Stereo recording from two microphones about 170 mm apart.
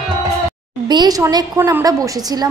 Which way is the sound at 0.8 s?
25° right (ahead or behind).